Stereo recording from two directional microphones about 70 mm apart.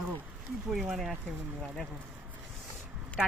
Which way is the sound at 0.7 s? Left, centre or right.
Centre.